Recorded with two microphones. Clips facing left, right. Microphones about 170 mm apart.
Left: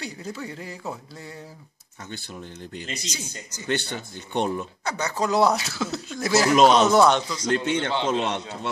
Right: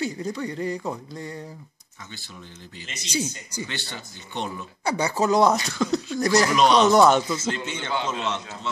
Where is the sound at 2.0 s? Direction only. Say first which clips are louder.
Left 5 dB; 50° left (ahead or behind).